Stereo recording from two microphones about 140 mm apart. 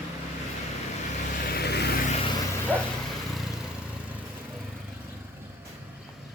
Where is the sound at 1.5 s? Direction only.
90° left.